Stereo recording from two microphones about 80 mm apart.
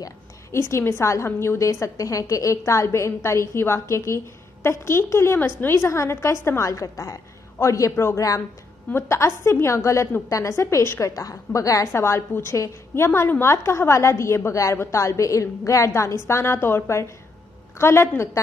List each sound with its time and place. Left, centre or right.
0.5 s a woman's voice: left